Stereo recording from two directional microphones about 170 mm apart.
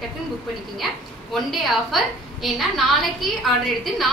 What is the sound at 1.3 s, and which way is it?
A woman's voice, centre (ahead or behind).